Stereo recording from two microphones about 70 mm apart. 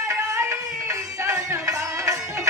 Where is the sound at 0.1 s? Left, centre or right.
Right.